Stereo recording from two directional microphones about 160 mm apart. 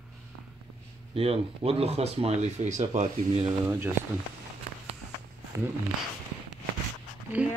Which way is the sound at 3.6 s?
15° right (ahead or behind).